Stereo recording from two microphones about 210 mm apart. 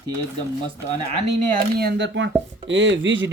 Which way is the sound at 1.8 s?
55° right (ahead or behind).